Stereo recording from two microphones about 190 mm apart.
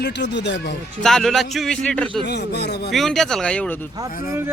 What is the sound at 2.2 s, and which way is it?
Speech, 60° left (ahead or behind).